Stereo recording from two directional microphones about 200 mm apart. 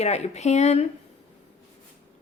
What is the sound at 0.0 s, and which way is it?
Speech, 35° left (ahead or behind).